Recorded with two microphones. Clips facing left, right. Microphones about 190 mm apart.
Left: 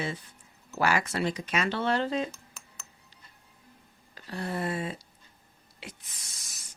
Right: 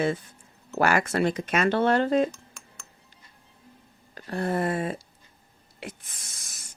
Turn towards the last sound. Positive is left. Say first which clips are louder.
# right 3 dB
turn(degrees=-50)  # may be behind; listen again after turning